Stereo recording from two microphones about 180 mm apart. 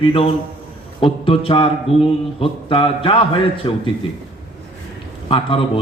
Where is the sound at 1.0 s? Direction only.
30° left (ahead or behind).